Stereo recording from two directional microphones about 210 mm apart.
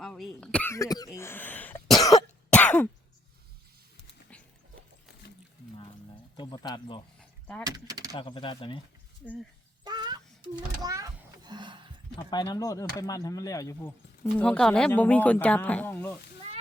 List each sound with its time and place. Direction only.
0.0 s throat clearing: 5° left (ahead or behind)
2.5 s throat clearing: 5° left (ahead or behind)
4.0 s a sound: 5° left (ahead or behind)
6.3 s a sound: 20° left (ahead or behind)
7.2 s door: 5° left (ahead or behind)
7.6 s speech: 20° right (ahead or behind)
8.1 s speech: 20° left (ahead or behind)
9.8 s a sound: 20° right (ahead or behind)
12.1 s speech: 20° left (ahead or behind)